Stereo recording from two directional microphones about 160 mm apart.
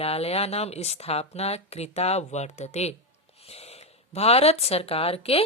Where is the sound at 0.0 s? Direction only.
40° left (ahead or behind).